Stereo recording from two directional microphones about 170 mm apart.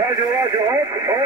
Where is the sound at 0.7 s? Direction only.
20° right (ahead or behind).